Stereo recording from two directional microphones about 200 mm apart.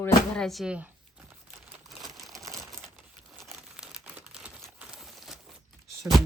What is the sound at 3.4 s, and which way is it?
Crumpling, centre (ahead or behind).